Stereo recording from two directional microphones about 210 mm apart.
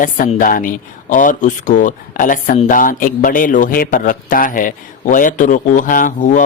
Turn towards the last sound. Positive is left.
turn(degrees=40)  # may be behind; listen again after turning